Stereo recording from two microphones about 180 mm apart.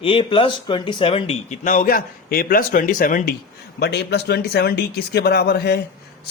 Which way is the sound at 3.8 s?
70° left (ahead or behind).